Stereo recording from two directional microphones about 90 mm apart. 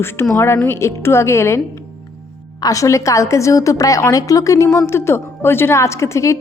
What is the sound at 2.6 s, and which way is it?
A woman's voice, 35° left (ahead or behind).